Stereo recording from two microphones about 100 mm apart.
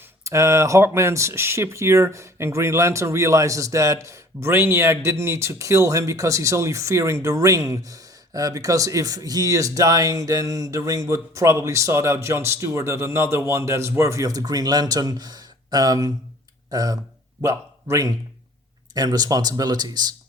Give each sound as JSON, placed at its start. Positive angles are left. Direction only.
{"t": 0.3, "sound": "a man's voice", "side_deg": -30}
{"t": 18.9, "sound": "speech", "side_deg": -40}